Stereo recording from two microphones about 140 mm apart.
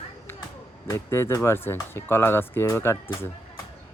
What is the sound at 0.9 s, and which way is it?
Speech, 20° left (ahead or behind).